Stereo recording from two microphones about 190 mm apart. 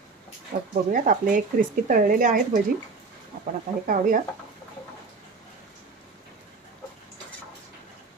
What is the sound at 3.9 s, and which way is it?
Speech, 45° right (ahead or behind).